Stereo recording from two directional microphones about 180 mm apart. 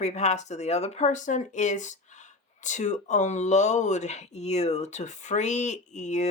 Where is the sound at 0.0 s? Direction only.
40° left (ahead or behind).